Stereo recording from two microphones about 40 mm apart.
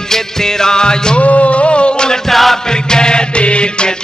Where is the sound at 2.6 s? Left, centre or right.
Centre.